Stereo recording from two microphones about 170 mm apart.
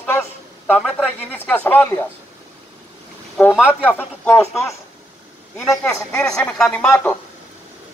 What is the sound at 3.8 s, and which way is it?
A man's voice, 10° left (ahead or behind).